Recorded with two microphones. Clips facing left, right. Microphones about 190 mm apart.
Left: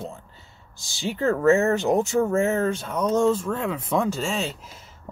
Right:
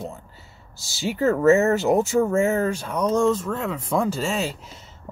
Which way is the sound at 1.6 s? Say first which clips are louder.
Right 2 dB; 5° right (ahead or behind).